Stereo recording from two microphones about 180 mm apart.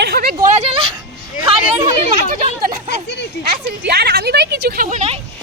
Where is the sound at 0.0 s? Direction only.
60° right (ahead or behind).